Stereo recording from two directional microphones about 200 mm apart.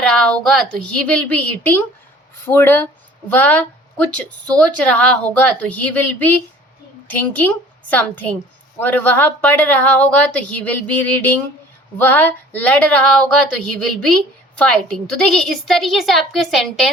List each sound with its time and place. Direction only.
0.0 s a woman's voice: 5° left (ahead or behind)
14.6 s a woman's voice: 5° left (ahead or behind)